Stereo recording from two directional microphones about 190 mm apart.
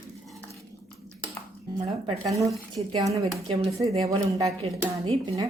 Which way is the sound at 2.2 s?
15° right (ahead or behind).